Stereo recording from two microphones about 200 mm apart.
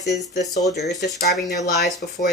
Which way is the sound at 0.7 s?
55° left (ahead or behind).